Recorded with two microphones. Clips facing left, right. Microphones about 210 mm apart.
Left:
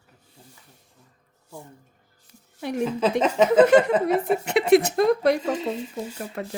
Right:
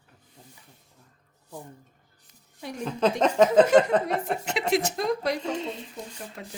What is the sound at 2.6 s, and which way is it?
Speech, 65° left (ahead or behind).